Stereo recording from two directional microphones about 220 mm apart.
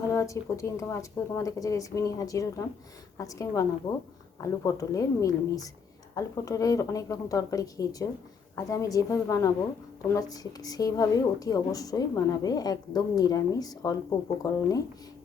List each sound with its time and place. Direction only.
0.1 s a woman's voice: 15° left (ahead or behind)